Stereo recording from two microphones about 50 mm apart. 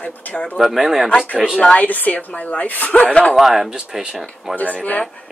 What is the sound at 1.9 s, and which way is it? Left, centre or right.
Speech, left.